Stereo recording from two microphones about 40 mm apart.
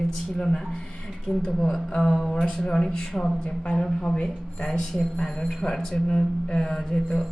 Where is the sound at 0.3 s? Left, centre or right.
Centre.